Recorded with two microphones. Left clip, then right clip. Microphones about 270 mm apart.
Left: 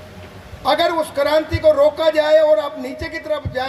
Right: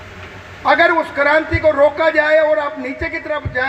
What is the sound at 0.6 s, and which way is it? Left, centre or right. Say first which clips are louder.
A man's voice: right 4 dB; left.